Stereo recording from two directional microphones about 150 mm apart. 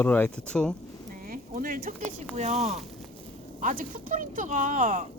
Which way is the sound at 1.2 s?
70° right (ahead or behind).